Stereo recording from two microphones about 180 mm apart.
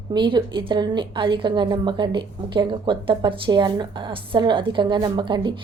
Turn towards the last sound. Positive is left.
turn(degrees=-25)  # may be behind; listen again after turning